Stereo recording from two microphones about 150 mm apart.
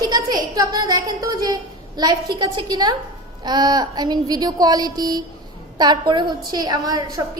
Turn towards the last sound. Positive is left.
turn(degrees=-25)  # may be behind; listen again after turning